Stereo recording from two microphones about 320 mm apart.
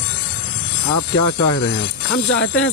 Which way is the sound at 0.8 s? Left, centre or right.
Left.